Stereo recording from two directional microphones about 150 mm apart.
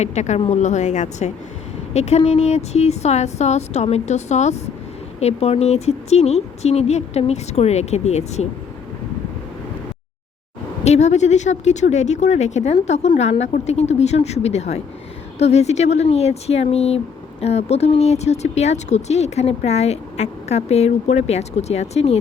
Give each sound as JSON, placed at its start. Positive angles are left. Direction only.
{"t": 0.0, "sound": "speech", "side_deg": 50}
{"t": 10.8, "sound": "speech", "side_deg": 50}